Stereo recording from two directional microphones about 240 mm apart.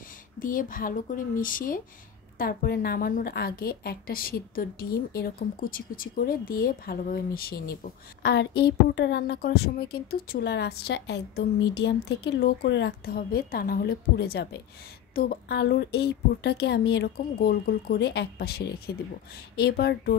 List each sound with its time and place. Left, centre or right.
0.4 s a woman's voice: left